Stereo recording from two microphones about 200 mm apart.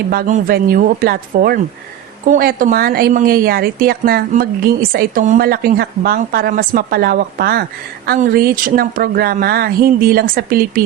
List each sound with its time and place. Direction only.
0.1 s speech: 45° right (ahead or behind)